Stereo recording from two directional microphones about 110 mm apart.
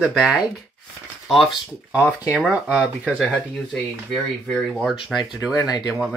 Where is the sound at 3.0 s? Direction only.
10° left (ahead or behind).